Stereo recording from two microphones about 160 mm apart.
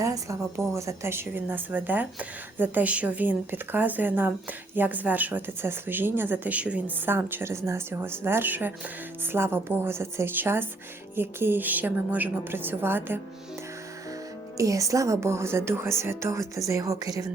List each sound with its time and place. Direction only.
0.0 s a woman's voice: 20° right (ahead or behind)
14.6 s a woman's voice: 20° right (ahead or behind)